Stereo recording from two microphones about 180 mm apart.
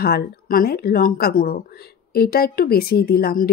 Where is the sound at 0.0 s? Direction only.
60° left (ahead or behind).